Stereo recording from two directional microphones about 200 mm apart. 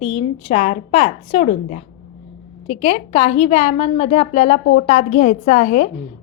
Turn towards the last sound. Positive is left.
turn(degrees=40)  # may be behind; listen again after turning